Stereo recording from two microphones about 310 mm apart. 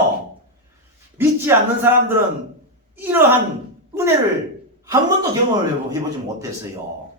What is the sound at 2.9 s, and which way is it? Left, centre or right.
Speech, centre.